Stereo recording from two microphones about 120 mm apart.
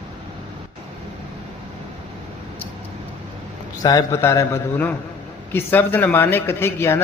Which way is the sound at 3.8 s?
30° left (ahead or behind).